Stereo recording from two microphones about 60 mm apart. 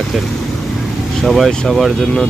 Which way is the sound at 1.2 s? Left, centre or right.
Centre.